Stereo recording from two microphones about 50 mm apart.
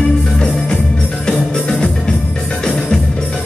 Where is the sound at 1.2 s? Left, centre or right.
Centre.